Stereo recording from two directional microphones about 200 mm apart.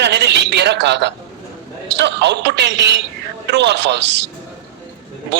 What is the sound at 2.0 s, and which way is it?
Speech, 60° right (ahead or behind).